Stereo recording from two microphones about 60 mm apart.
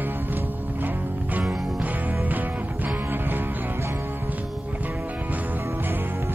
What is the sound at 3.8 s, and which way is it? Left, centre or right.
Music, right.